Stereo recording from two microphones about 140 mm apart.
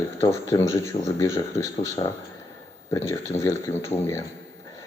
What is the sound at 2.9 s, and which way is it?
Speech, 25° left (ahead or behind).